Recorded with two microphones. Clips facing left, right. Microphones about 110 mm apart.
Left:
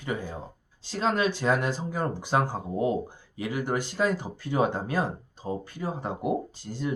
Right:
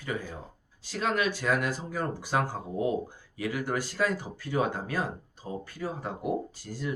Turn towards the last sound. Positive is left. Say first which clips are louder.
# left 3 dB
turn(degrees=25)  # may be behind; listen again after turning